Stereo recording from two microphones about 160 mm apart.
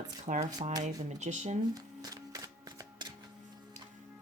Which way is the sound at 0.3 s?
45° right (ahead or behind).